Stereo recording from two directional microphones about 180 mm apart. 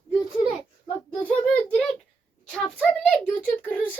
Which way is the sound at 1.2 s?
5° left (ahead or behind).